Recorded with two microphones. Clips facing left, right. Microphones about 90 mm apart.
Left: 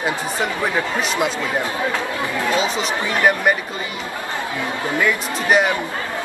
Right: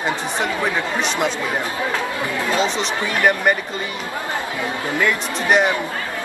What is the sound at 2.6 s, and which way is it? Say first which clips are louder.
Speech: even; 5° left (ahead or behind).